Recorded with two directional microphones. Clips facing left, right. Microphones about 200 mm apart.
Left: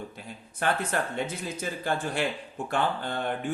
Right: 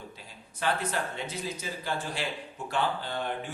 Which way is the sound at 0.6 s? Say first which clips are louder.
Left 2 dB; 55° left (ahead or behind).